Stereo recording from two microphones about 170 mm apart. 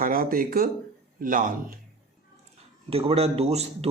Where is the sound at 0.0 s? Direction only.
55° right (ahead or behind).